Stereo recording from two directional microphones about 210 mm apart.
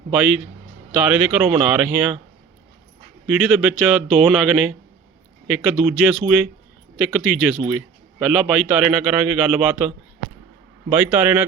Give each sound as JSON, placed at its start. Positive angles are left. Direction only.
{"t": 0.1, "sound": "a man's voice", "side_deg": -5}
{"t": 3.2, "sound": "a man's voice", "side_deg": -5}